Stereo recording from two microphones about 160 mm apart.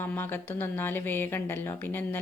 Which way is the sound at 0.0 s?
15° left (ahead or behind).